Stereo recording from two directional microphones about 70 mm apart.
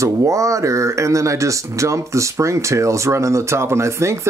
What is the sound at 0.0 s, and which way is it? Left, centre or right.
Speech, right.